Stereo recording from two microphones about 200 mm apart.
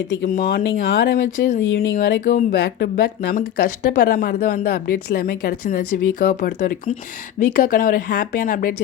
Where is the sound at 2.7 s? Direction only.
55° left (ahead or behind).